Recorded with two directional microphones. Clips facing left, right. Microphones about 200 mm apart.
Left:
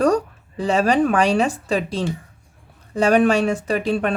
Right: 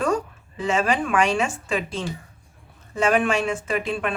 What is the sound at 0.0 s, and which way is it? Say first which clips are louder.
Speech: left 6 dB; 40° left (ahead or behind).